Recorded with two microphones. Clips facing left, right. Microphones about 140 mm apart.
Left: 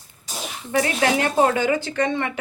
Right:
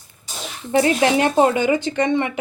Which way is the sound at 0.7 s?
25° right (ahead or behind).